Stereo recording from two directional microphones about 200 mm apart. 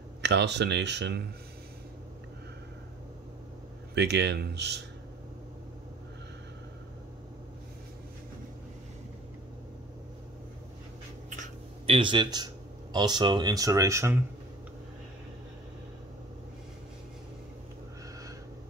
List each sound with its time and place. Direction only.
0.2 s speech: 60° right (ahead or behind)
3.9 s speech: 55° right (ahead or behind)
11.2 s a sound: 35° right (ahead or behind)
11.9 s speech: 25° right (ahead or behind)